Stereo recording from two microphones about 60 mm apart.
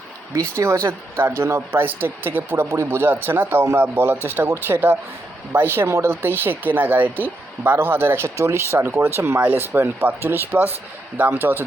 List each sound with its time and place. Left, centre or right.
0.3 s speech: right
0.9 s speech: right
3.5 s speech: right
3.8 s speech: right
8.4 s speech: right
9.4 s speech: right